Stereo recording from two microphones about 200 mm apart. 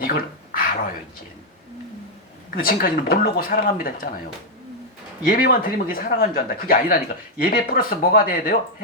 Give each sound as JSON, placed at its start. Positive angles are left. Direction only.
{"t": 0.0, "sound": "a sound", "side_deg": 45}
{"t": 2.6, "sound": "speech", "side_deg": 45}
{"t": 5.3, "sound": "speech", "side_deg": 45}